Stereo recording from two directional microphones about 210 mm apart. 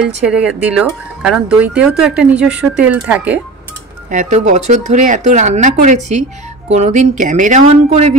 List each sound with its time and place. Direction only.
0.2 s speech: 5° right (ahead or behind)
4.1 s speech: 35° right (ahead or behind)